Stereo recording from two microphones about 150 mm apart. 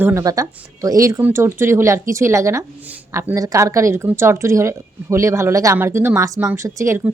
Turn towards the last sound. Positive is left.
turn(degrees=-20)  # may be behind; listen again after turning